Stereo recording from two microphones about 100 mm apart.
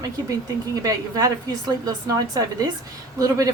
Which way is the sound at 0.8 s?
40° right (ahead or behind).